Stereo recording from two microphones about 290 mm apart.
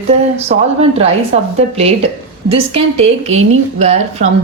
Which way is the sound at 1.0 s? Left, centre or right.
Right.